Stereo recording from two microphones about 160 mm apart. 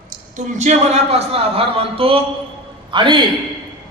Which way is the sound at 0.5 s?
45° right (ahead or behind).